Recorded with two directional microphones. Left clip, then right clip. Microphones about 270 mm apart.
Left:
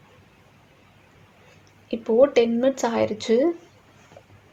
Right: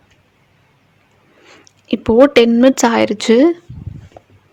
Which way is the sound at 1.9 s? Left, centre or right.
Right.